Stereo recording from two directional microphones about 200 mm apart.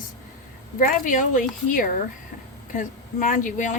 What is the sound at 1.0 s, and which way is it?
Speech, 45° left (ahead or behind).